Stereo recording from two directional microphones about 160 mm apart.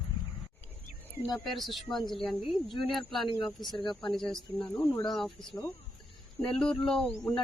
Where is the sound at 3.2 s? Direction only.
30° left (ahead or behind).